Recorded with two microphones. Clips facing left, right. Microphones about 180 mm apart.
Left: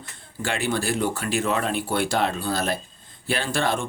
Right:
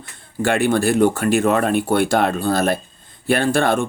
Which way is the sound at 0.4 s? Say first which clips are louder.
Right 8 dB; 50° right (ahead or behind).